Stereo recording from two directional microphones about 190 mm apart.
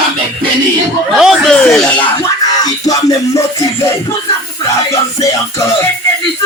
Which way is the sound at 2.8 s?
20° left (ahead or behind).